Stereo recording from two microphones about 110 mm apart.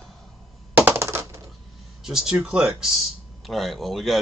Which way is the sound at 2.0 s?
5° right (ahead or behind).